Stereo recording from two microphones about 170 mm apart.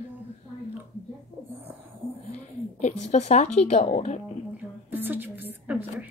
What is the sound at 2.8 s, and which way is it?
A woman's voice, 45° left (ahead or behind).